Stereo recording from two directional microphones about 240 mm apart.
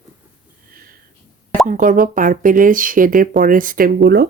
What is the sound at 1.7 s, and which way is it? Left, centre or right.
Speech, right.